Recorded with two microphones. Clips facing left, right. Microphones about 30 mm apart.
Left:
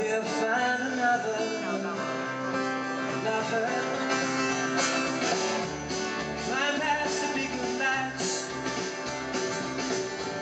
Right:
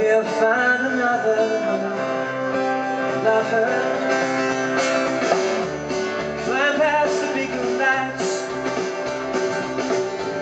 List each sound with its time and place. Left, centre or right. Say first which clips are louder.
0.0 s music: right 10 dB; right
1.0 s music: right 7 dB; centre
3.3 s music: right 10 dB; right
6.5 s music: right 9 dB; right